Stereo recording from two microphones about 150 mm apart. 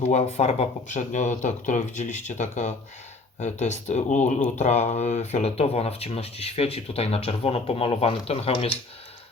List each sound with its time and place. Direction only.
0.1 s speech: 50° left (ahead or behind)